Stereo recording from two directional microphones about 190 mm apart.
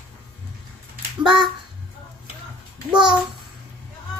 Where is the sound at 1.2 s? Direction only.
25° right (ahead or behind).